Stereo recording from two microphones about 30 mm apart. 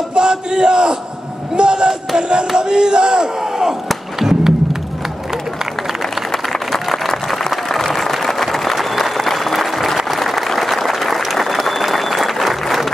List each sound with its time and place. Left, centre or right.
0.1 s battle cry: right
1.6 s crowd: right
4.2 s music: centre
6.3 s a sound: centre
7.7 s applause: centre